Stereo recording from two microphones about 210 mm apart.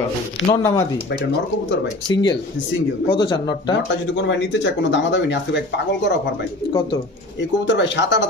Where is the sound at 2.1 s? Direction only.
20° left (ahead or behind).